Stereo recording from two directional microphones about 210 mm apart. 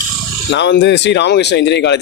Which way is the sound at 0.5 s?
55° left (ahead or behind).